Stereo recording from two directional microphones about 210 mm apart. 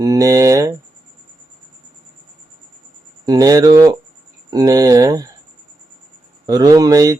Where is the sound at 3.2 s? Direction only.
15° right (ahead or behind).